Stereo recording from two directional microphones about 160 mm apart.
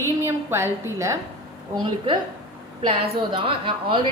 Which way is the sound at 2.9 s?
30° right (ahead or behind).